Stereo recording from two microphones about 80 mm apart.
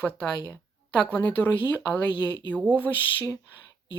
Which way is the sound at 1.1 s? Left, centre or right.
Left.